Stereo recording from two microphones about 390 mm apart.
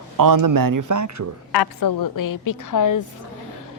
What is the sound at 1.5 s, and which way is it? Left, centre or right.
A woman's voice, left.